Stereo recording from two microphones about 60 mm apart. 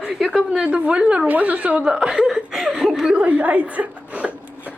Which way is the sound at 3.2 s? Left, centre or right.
Right.